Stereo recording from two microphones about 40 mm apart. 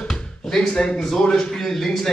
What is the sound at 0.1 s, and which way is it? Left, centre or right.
Speech, centre.